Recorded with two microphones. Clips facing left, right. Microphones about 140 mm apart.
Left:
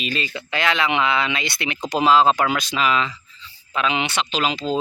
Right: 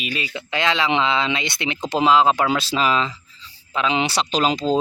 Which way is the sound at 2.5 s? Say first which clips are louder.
Right 1 dB; 30° right (ahead or behind).